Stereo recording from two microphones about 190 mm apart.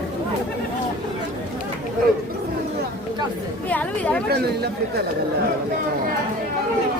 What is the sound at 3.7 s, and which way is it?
Speech, 10° left (ahead or behind).